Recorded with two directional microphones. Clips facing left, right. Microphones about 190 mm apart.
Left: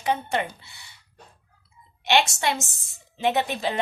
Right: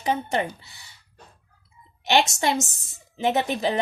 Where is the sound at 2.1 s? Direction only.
40° right (ahead or behind).